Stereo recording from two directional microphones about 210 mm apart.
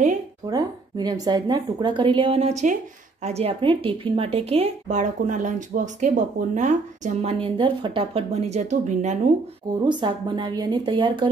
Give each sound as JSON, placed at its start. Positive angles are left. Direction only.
{"t": 0.5, "sound": "speech", "side_deg": -20}
{"t": 9.8, "sound": "speech", "side_deg": -20}